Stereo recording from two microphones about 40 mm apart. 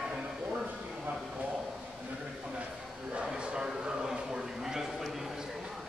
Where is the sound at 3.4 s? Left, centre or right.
Right; by 5.3 s centre.